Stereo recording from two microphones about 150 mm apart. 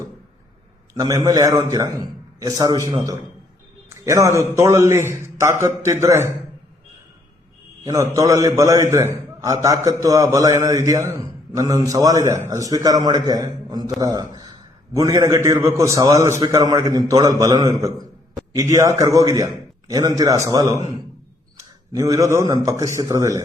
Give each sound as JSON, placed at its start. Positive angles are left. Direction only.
{"t": 0.9, "sound": "a man's voice", "side_deg": -25}
{"t": 7.9, "sound": "a man's voice", "side_deg": -20}
{"t": 21.9, "sound": "a man's voice", "side_deg": -20}